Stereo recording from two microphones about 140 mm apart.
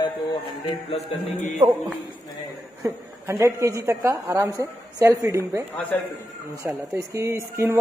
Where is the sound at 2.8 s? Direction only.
20° right (ahead or behind).